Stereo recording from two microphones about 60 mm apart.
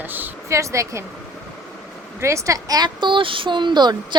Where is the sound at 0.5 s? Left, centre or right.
Right.